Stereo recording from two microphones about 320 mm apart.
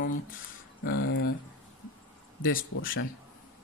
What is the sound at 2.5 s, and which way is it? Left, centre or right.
Speech, left.